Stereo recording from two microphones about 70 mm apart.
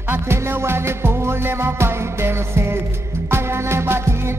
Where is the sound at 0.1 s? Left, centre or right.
Right.